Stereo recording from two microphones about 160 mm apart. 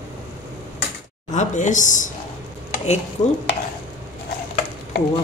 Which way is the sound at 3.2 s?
25° left (ahead or behind).